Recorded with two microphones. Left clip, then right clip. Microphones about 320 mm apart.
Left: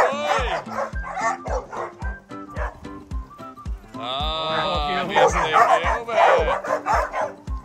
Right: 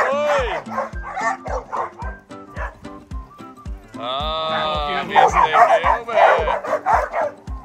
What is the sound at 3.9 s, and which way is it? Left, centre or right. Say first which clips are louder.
Speech: right 3 dB; centre.